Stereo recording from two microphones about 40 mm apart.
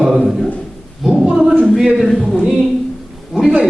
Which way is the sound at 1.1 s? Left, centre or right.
Right.